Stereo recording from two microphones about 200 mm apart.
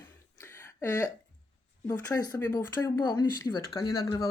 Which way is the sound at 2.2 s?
10° left (ahead or behind).